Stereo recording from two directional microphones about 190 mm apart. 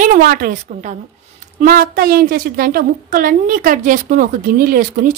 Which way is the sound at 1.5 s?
45° right (ahead or behind).